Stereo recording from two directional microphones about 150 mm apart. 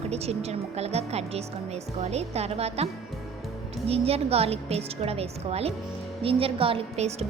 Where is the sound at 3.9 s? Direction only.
40° right (ahead or behind).